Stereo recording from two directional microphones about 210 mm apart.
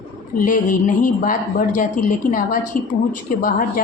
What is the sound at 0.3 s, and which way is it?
Speech, 40° left (ahead or behind).